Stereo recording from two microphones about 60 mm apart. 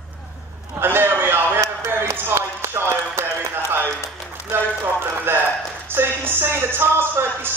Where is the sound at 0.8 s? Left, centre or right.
Right.